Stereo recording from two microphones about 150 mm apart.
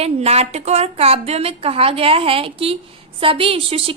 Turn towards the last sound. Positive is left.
turn(degrees=-40)  # may be behind; listen again after turning